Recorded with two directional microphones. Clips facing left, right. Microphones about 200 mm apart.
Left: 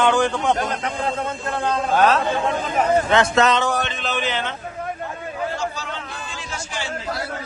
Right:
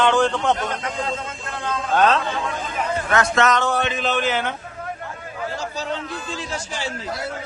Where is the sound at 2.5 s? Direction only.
50° left (ahead or behind).